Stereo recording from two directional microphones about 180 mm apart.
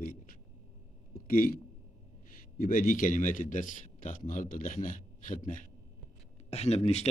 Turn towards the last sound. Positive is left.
turn(degrees=35)  # may be behind; listen again after turning